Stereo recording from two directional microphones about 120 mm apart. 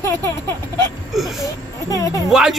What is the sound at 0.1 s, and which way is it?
Speech, 20° left (ahead or behind).